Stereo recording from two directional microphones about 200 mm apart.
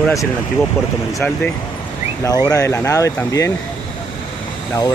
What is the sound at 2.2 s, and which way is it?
Speech, 20° left (ahead or behind).